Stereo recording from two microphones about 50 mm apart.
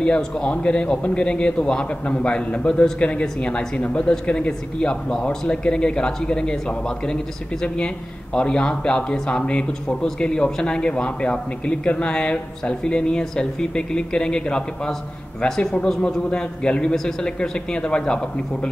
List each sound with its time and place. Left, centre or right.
0.0 s a man's voice: left
7.6 s a man's voice: centre
16.9 s speech: centre
17.4 s a man's voice: left